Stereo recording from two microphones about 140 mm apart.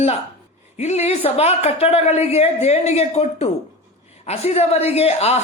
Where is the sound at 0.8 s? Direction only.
50° left (ahead or behind).